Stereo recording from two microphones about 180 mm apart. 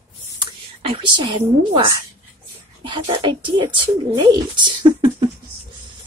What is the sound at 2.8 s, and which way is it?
Speech, 25° right (ahead or behind).